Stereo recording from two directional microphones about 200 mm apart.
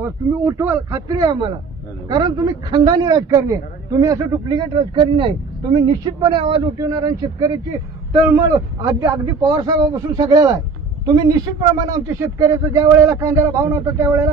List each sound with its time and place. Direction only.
0.0 s a man's voice: 15° right (ahead or behind)